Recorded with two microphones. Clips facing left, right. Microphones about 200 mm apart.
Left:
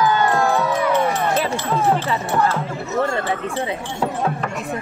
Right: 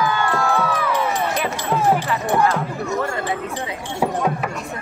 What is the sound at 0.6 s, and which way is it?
Crowd, 20° left (ahead or behind).